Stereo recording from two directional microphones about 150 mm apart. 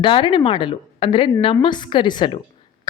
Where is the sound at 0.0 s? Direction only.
35° left (ahead or behind).